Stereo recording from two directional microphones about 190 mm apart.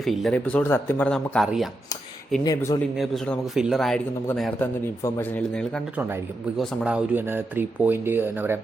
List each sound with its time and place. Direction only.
0.0 s a man's voice: centre (ahead or behind)
2.4 s a man's voice: 20° left (ahead or behind)
3.0 s a man's voice: centre (ahead or behind)
6.6 s speech: 5° right (ahead or behind)